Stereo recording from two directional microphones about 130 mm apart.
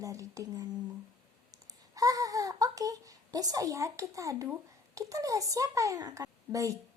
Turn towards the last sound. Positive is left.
turn(degrees=-25)  # may be behind; listen again after turning